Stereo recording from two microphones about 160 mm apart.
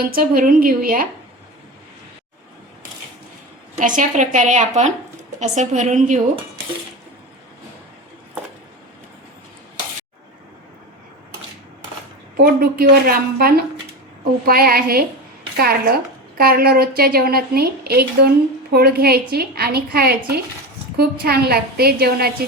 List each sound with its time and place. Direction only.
0.0 s a woman's voice: 65° right (ahead or behind)
3.8 s a woman's voice: 55° right (ahead or behind)
12.4 s a woman's voice: 70° right (ahead or behind)